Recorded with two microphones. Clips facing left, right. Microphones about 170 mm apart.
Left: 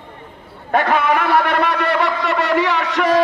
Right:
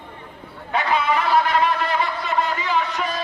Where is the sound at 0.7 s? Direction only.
55° left (ahead or behind).